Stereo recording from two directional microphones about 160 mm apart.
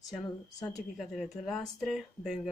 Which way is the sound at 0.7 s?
Centre (ahead or behind).